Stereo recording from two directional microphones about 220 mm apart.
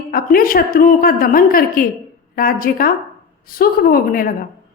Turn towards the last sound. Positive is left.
turn(degrees=40)  # may be behind; listen again after turning